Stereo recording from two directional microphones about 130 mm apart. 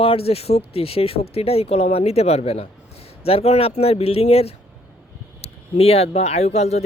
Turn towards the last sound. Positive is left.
turn(degrees=55)  # may be behind; listen again after turning